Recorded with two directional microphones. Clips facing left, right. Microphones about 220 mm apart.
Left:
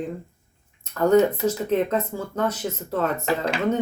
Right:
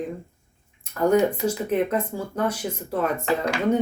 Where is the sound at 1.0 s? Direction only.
10° right (ahead or behind).